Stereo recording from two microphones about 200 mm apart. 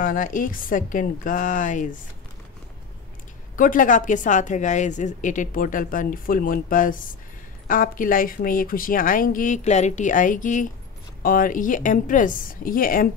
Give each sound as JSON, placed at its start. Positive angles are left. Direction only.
{"t": 0.0, "sound": "a woman's voice", "side_deg": 45}
{"t": 3.5, "sound": "a woman's voice", "side_deg": 45}